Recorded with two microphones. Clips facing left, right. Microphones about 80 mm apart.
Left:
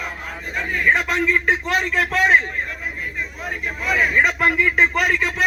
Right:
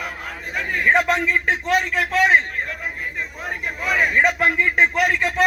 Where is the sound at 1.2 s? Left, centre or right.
Centre.